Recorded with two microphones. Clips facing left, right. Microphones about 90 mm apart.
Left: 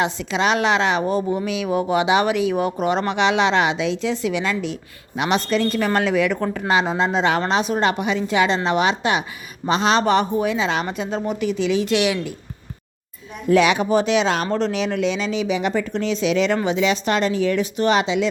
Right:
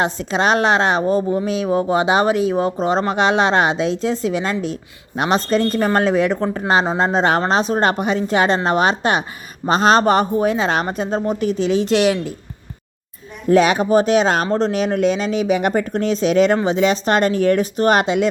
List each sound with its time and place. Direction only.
0.0 s speech: 40° right (ahead or behind)
13.5 s speech: 40° right (ahead or behind)